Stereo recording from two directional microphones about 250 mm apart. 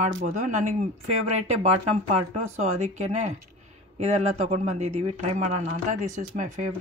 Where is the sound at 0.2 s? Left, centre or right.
Right.